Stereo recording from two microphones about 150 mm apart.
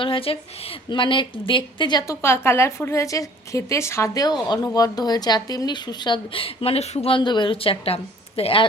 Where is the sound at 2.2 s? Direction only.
15° left (ahead or behind).